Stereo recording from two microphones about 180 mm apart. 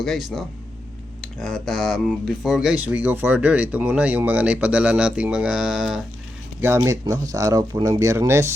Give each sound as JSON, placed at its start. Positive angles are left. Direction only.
{"t": 0.0, "sound": "speech", "side_deg": 0}
{"t": 6.6, "sound": "speech", "side_deg": -15}